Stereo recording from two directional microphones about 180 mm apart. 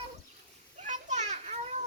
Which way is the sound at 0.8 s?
40° right (ahead or behind).